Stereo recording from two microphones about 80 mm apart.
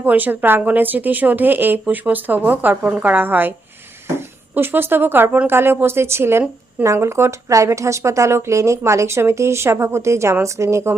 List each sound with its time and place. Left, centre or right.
0.0 s speech: right
4.5 s a woman's voice: right